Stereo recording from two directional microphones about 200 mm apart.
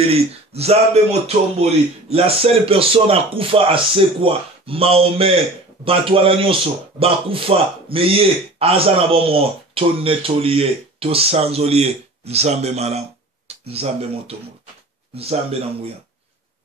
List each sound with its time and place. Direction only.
0.0 s a man's voice: 30° right (ahead or behind)